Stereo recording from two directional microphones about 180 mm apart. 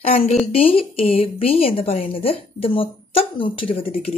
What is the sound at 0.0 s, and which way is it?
A woman's voice, 35° left (ahead or behind).